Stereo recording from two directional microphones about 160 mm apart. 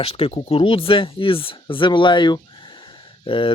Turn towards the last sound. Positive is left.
turn(degrees=30)  # may be behind; listen again after turning